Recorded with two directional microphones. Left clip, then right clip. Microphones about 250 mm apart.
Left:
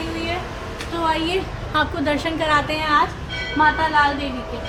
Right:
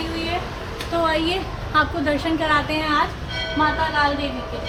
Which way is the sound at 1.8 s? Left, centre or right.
Left.